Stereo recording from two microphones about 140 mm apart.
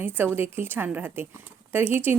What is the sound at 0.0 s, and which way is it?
A woman's voice, 15° right (ahead or behind).